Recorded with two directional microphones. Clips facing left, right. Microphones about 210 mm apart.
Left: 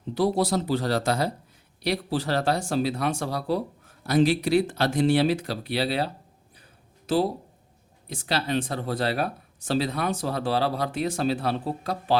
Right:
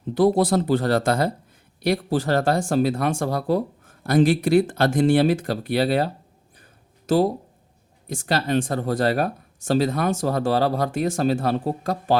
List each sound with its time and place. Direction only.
0.1 s speech: 50° right (ahead or behind)
7.1 s speech: 45° right (ahead or behind)